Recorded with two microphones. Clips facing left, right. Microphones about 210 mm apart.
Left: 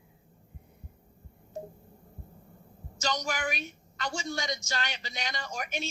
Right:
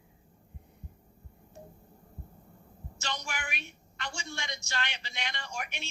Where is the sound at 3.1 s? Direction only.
40° left (ahead or behind).